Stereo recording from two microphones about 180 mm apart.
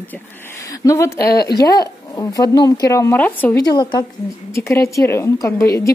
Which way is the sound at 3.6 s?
25° left (ahead or behind).